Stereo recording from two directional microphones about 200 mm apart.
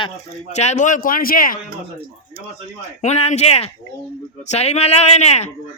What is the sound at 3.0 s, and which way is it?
Speech, 35° left (ahead or behind).